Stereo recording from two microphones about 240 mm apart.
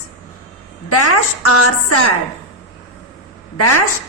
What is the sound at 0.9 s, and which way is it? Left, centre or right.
A woman's voice, left.